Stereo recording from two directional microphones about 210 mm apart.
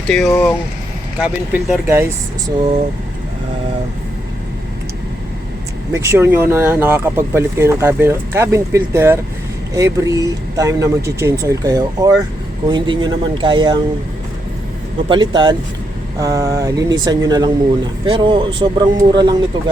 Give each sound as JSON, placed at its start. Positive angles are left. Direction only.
{"t": 0.1, "sound": "speech", "side_deg": 5}
{"t": 1.2, "sound": "speech", "side_deg": -5}
{"t": 5.9, "sound": "a man's voice", "side_deg": -15}
{"t": 15.1, "sound": "a man's voice", "side_deg": -20}